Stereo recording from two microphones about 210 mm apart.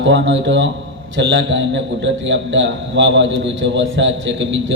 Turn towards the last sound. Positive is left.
turn(degrees=-60)  # may be behind; listen again after turning